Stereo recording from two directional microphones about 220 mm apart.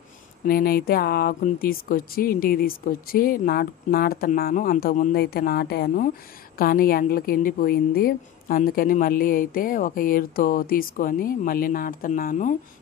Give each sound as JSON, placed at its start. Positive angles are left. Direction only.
{"t": 0.5, "sound": "a woman's voice", "side_deg": 40}